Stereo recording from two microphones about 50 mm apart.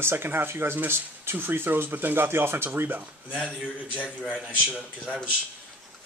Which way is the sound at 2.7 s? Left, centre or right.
Right.